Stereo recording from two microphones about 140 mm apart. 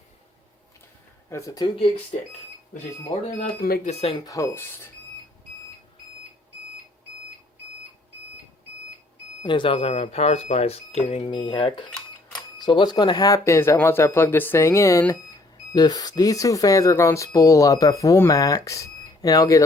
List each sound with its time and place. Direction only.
1.3 s speech: 25° left (ahead or behind)
2.1 s speech: 55° left (ahead or behind)
3.6 s speech: 90° left
3.9 s speech: 45° left (ahead or behind)
4.3 s speech: 20° left (ahead or behind)
9.4 s speech: 35° left (ahead or behind)